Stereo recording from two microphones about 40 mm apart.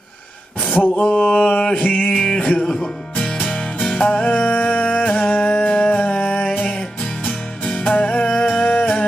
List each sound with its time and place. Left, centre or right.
0.7 s a sound: left
0.9 s mantra: left
1.7 s music: left
2.0 s mantra: left
2.6 s music: centre
3.3 s music: left
4.8 s music: left
5.9 s a sound: left
7.2 s music: left
8.6 s music: left